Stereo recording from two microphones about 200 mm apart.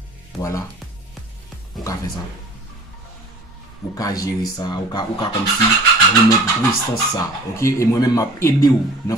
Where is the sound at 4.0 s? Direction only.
20° left (ahead or behind).